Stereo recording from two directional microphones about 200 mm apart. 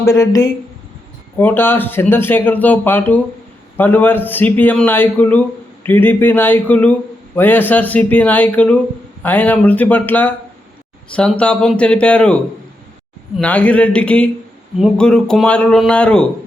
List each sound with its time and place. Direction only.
0.0 s speech: 15° left (ahead or behind)